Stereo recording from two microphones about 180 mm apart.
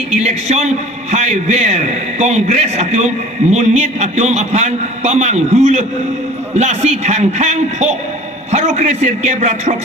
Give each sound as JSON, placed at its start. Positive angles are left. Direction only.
{"t": 0.1, "sound": "a man's voice", "side_deg": -40}